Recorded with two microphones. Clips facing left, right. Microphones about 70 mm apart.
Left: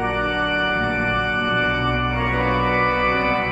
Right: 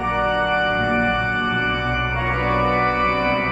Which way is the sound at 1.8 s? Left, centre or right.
Centre.